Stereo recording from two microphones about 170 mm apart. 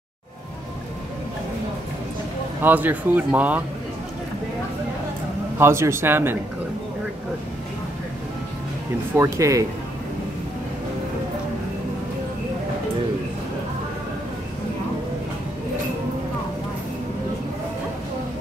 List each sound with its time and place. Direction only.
2.6 s speech: 10° right (ahead or behind)
5.6 s speech: 15° right (ahead or behind)
9.1 s speech: 20° right (ahead or behind)